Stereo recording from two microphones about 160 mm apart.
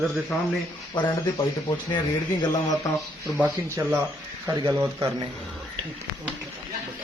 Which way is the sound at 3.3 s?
10° right (ahead or behind).